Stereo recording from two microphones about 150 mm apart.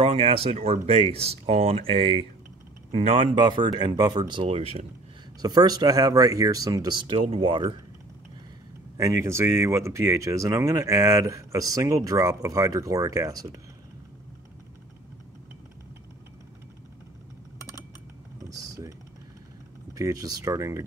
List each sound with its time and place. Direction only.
0.0 s speech: 35° right (ahead or behind)
5.4 s speech: 25° right (ahead or behind)
8.9 s speech: 20° right (ahead or behind)
18.4 s typing: 20° right (ahead or behind)
19.9 s speech: 20° right (ahead or behind)